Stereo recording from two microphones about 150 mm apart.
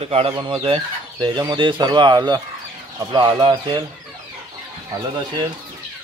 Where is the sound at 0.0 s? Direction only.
40° right (ahead or behind).